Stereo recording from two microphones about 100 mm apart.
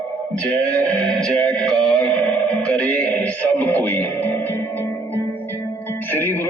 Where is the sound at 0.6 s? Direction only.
10° left (ahead or behind).